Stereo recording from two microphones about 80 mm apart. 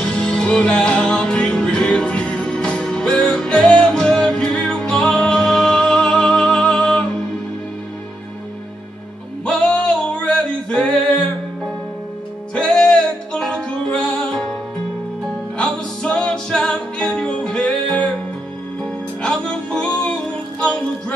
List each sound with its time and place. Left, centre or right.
0.0 s music: centre
10.1 s music: centre
12.5 s music: centre
15.5 s music: centre